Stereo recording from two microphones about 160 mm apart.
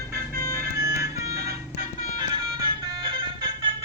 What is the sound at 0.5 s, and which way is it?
Music, 15° right (ahead or behind).